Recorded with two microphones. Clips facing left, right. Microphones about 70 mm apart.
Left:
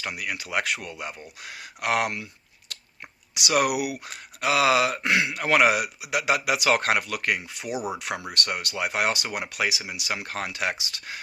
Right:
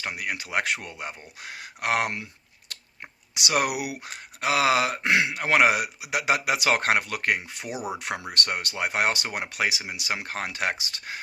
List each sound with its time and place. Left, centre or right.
0.0 s speech: right